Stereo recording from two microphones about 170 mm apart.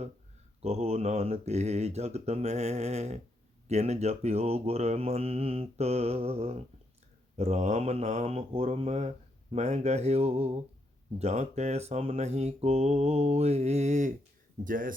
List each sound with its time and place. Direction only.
0.6 s speech: 40° right (ahead or behind)
14.6 s speech: 55° right (ahead or behind)